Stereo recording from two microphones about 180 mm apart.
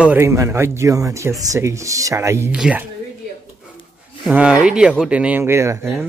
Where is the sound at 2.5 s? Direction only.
5° right (ahead or behind).